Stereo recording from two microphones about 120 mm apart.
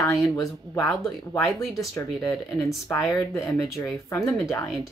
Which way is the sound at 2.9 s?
30° left (ahead or behind).